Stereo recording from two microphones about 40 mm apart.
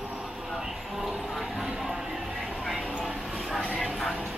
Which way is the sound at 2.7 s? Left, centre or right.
Centre.